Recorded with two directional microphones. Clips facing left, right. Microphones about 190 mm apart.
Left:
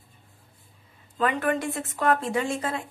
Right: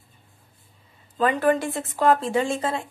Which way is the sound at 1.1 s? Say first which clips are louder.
Right 4 dB; 35° right (ahead or behind).